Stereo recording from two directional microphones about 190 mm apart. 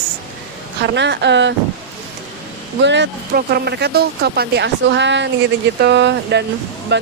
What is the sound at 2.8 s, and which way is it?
Speech, 65° right (ahead or behind).